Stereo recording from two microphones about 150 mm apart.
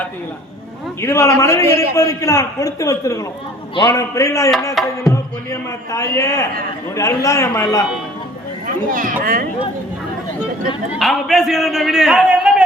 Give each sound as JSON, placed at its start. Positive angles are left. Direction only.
{"t": 1.0, "sound": "a man's voice", "side_deg": 20}
{"t": 4.8, "sound": "a man's voice", "side_deg": 0}
{"t": 5.9, "sound": "a man's voice", "side_deg": 20}
{"t": 8.6, "sound": "speech", "side_deg": -60}
{"t": 10.9, "sound": "a man's voice", "side_deg": 0}